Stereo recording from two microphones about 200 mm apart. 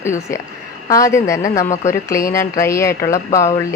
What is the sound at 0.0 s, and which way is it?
Speech, 15° left (ahead or behind).